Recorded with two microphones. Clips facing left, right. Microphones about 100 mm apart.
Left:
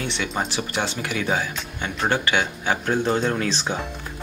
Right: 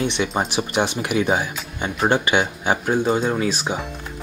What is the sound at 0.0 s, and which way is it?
Speech, 20° right (ahead or behind).